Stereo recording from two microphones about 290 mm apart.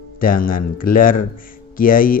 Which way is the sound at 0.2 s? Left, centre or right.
Left.